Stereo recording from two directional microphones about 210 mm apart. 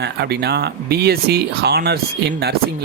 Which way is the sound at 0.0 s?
50° right (ahead or behind).